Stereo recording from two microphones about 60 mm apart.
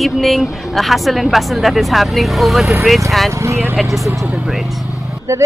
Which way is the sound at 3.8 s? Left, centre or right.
Centre.